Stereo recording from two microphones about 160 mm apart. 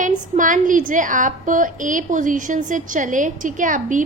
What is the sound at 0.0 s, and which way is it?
A woman's voice, 55° right (ahead or behind).